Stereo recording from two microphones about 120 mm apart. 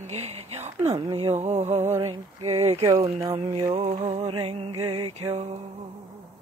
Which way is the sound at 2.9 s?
50° right (ahead or behind).